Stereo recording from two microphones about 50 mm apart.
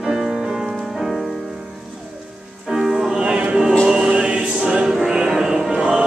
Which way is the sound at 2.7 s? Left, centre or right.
Centre.